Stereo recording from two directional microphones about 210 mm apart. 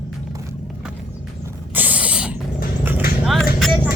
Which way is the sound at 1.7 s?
10° right (ahead or behind).